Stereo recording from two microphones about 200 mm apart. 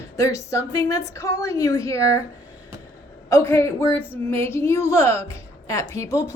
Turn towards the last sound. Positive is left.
turn(degrees=15)  # may be behind; listen again after turning